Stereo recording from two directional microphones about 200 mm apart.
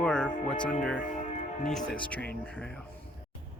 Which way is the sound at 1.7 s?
5° left (ahead or behind).